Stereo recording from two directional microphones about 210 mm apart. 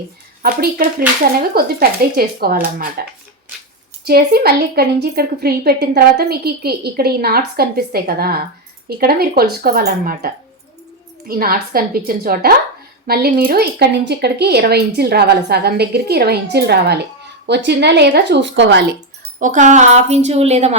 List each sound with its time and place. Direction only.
0.4 s a woman's voice: 45° right (ahead or behind)
19.4 s a woman's voice: 35° right (ahead or behind)